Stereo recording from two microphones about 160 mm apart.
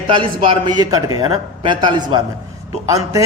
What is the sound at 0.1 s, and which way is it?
A man's voice, 30° right (ahead or behind).